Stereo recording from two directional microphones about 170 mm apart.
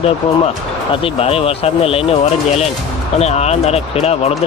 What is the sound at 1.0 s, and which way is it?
Speech, 35° left (ahead or behind).